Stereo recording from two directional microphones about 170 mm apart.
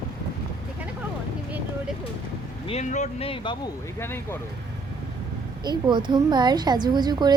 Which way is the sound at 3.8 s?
15° left (ahead or behind).